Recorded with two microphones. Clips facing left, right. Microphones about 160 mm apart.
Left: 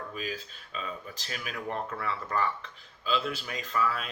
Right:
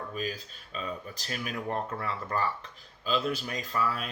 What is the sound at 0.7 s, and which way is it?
Speech, 40° right (ahead or behind).